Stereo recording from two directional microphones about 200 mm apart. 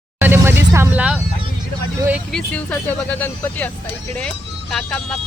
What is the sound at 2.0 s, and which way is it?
Speech, 10° right (ahead or behind).